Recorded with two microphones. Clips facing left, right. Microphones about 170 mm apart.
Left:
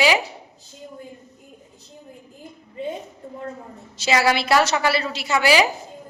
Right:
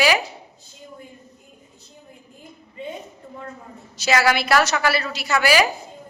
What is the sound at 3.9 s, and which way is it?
A woman's voice, 25° left (ahead or behind).